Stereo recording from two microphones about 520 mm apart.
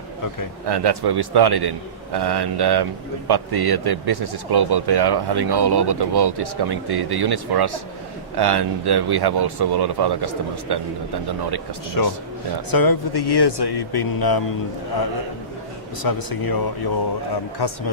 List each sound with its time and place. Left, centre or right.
0.7 s speech: right
12.0 s speech: left
16.0 s speech: left
17.6 s speech: left